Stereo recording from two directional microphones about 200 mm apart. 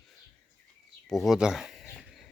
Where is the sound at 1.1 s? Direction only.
Centre (ahead or behind).